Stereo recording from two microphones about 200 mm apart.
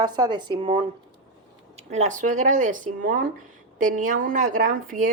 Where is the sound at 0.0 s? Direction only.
20° right (ahead or behind).